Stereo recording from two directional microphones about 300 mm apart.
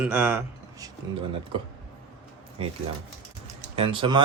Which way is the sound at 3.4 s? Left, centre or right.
Centre.